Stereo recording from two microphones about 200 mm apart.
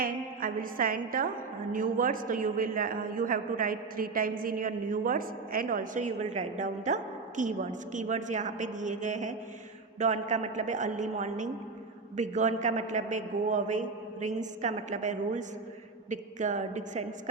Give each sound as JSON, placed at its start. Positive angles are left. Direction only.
{"t": 0.0, "sound": "a woman's voice", "side_deg": -45}